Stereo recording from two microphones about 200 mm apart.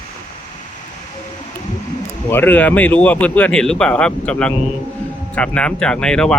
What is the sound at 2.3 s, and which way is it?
Speech, 10° left (ahead or behind).